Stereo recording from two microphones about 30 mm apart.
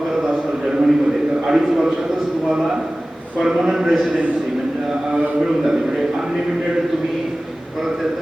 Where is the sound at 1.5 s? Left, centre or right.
Centre.